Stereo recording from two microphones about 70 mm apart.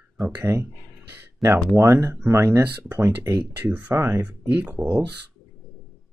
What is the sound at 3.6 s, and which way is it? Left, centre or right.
Speech, right.